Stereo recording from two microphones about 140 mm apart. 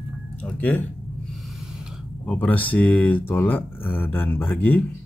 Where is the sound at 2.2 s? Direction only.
10° left (ahead or behind).